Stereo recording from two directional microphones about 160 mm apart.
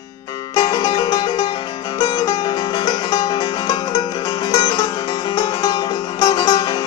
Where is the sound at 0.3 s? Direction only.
25° left (ahead or behind).